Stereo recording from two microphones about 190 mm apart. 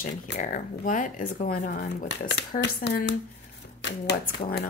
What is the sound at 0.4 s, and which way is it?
Speech, 45° left (ahead or behind).